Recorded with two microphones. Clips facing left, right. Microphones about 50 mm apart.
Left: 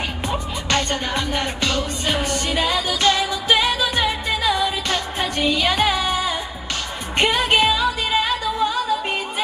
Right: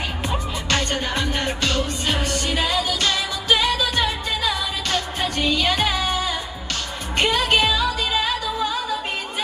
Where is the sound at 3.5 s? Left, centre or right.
Centre.